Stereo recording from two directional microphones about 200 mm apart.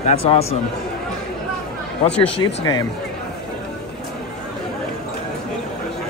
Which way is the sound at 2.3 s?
20° left (ahead or behind).